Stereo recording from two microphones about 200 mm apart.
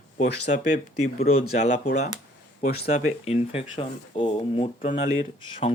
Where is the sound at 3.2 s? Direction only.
30° left (ahead or behind).